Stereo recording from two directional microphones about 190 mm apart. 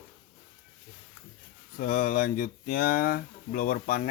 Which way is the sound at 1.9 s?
45° left (ahead or behind).